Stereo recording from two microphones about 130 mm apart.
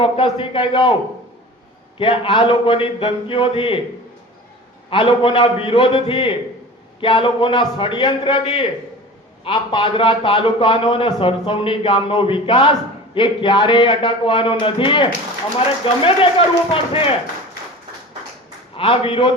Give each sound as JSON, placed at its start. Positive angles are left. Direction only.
{"t": 0.0, "sound": "a man's voice", "side_deg": 40}
{"t": 2.0, "sound": "a man's voice", "side_deg": 40}
{"t": 4.9, "sound": "a man's voice", "side_deg": 40}
{"t": 18.8, "sound": "a man's voice", "side_deg": 45}